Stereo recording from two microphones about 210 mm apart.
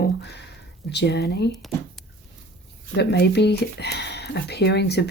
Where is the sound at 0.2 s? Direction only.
55° left (ahead or behind).